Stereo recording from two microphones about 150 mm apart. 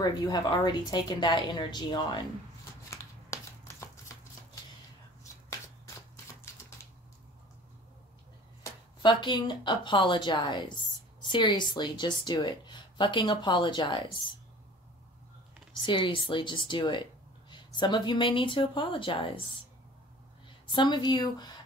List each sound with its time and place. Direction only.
0.0 s a woman's voice: 30° left (ahead or behind)
2.9 s a sound: 20° left (ahead or behind)
9.0 s speech: 30° left (ahead or behind)
15.8 s speech: 35° left (ahead or behind)
20.7 s a woman's voice: 30° left (ahead or behind)